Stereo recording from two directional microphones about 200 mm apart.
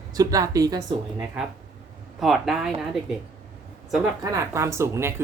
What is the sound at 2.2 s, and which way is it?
Speech, centre (ahead or behind).